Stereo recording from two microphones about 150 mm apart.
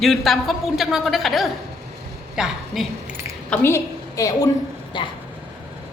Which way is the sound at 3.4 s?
10° left (ahead or behind).